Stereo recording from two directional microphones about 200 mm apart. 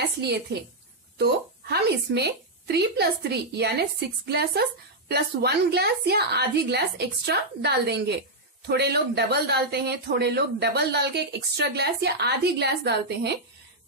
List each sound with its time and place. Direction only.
1.1 s speech: 55° right (ahead or behind)